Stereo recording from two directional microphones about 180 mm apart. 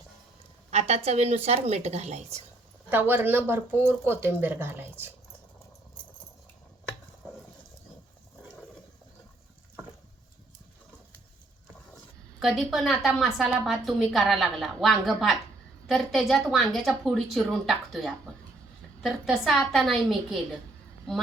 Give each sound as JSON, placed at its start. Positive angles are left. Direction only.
{"t": 0.7, "sound": "a woman's voice", "side_deg": -35}
{"t": 2.9, "sound": "speech", "side_deg": -10}
{"t": 12.4, "sound": "a woman's voice", "side_deg": 0}